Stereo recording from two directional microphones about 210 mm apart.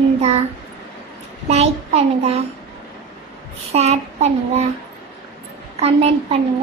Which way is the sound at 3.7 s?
30° right (ahead or behind).